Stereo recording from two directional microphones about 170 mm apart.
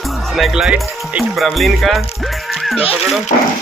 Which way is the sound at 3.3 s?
45° left (ahead or behind).